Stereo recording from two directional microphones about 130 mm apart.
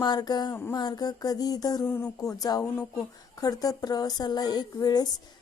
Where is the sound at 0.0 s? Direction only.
30° left (ahead or behind).